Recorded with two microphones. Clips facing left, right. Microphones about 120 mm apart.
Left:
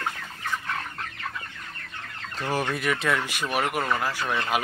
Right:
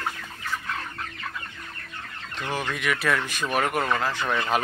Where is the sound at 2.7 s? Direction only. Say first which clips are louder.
Left 1 dB; 35° left (ahead or behind).